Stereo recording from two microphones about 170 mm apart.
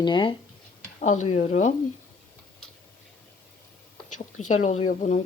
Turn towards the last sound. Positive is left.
turn(degrees=50)  # may be behind; listen again after turning